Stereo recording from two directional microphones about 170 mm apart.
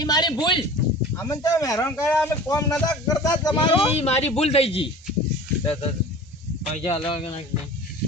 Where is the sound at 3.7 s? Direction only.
35° left (ahead or behind).